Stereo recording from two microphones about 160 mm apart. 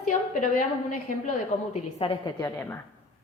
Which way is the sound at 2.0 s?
35° left (ahead or behind).